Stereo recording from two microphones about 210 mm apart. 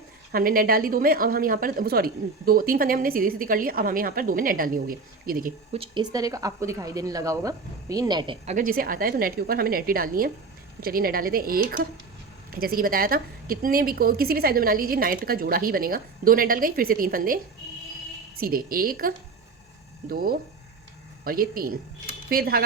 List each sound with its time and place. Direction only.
0.3 s a woman's voice: 45° right (ahead or behind)
5.7 s speech: 25° right (ahead or behind)
8.4 s a woman's voice: 40° right (ahead or behind)